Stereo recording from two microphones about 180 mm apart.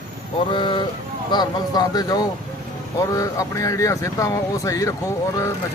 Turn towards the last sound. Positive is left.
turn(degrees=15)  # may be behind; listen again after turning